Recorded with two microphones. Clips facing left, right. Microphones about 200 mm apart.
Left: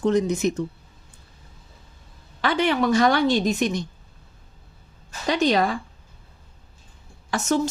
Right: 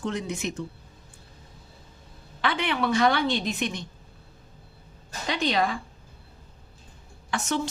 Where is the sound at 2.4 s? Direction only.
40° left (ahead or behind).